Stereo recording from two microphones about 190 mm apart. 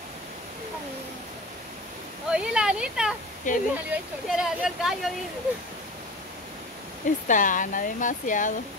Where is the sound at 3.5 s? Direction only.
40° left (ahead or behind).